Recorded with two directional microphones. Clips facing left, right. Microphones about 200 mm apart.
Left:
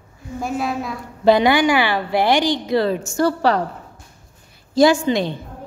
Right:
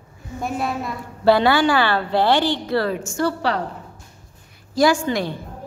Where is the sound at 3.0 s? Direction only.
40° left (ahead or behind).